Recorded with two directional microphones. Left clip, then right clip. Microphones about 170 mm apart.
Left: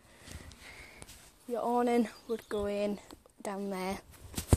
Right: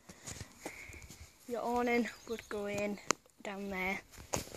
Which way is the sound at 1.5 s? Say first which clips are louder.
Left 4 dB; 10° left (ahead or behind).